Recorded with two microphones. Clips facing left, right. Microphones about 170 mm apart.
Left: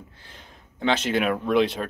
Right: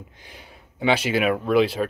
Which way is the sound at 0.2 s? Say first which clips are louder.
Right 3 dB; 10° right (ahead or behind).